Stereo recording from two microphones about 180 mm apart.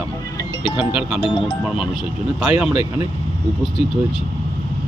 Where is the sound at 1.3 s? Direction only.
25° left (ahead or behind).